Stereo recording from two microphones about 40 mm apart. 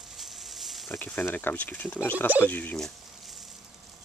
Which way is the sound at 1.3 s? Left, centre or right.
Left.